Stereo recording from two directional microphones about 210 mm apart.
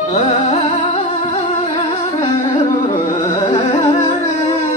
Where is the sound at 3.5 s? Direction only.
20° left (ahead or behind).